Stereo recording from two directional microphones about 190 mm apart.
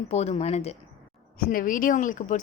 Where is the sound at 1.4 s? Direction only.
50° left (ahead or behind).